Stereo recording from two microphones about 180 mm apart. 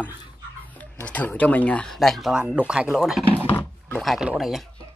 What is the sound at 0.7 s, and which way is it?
Speech, 10° left (ahead or behind).